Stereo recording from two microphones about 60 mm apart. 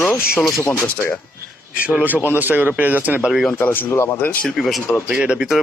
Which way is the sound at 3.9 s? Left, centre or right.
Left.